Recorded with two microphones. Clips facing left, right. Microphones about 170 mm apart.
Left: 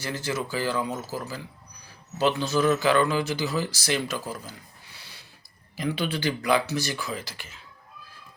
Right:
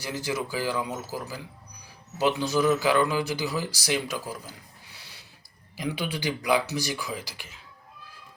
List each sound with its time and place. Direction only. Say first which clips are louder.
0.0 s speech: even; 15° right (ahead or behind)
4.9 s snort: left 2 dB; 15° right (ahead or behind)
5.7 s speech: left 3 dB; 15° right (ahead or behind)